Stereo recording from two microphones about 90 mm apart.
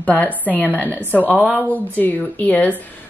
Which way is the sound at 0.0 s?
20° left (ahead or behind).